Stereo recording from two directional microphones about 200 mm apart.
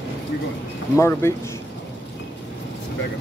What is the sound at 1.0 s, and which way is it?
Speech, 10° left (ahead or behind).